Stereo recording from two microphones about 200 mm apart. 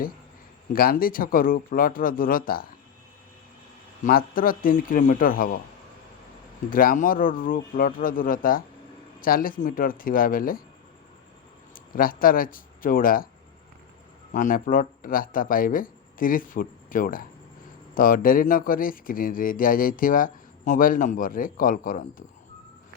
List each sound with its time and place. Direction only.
0.7 s speech: 45° left (ahead or behind)
4.0 s speech: 45° left (ahead or behind)
6.7 s speech: 45° left (ahead or behind)
11.7 s speech: 45° left (ahead or behind)
14.3 s speech: 40° left (ahead or behind)